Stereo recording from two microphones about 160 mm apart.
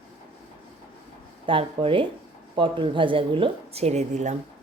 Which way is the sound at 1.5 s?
35° right (ahead or behind).